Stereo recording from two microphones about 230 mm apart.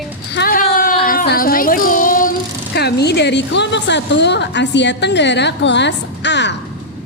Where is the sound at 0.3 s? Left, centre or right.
Left.